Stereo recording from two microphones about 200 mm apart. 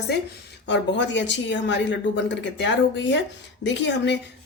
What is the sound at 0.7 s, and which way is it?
Speech, 65° left (ahead or behind).